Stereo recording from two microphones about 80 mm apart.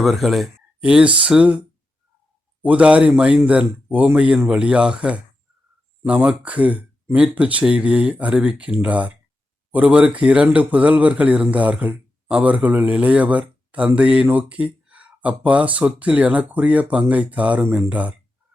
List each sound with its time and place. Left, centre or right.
0.0 s speech: centre
0.8 s speech: centre
2.6 s speech: centre